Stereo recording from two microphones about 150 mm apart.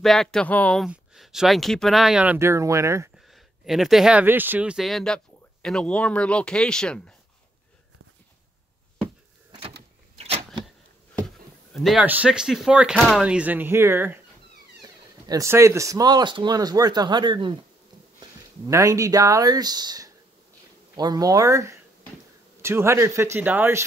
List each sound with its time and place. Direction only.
0.0 s speech: 5° left (ahead or behind)
0.8 s speech: centre (ahead or behind); by 3.1 s 20° right (ahead or behind)
3.2 s speech: centre (ahead or behind)
10.1 s a sound: 40° right (ahead or behind)
11.1 s a sound: centre (ahead or behind)
12.1 s speech: 5° right (ahead or behind)
14.8 s speech: 25° right (ahead or behind)